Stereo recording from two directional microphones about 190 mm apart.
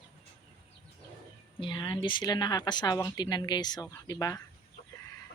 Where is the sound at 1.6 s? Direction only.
20° left (ahead or behind).